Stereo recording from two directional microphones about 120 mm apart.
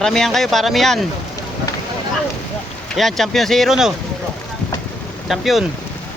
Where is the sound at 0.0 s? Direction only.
5° left (ahead or behind).